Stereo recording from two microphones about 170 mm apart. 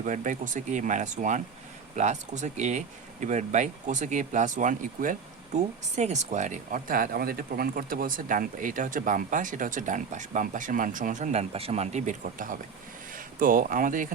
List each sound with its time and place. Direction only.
0.0 s speech: 50° right (ahead or behind)